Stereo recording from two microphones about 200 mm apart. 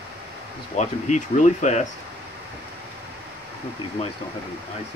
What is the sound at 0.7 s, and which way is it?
Speech, 35° left (ahead or behind).